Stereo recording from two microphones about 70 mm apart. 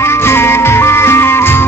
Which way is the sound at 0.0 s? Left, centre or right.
Left.